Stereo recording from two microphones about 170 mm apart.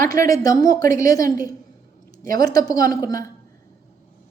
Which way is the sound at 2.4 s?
20° left (ahead or behind).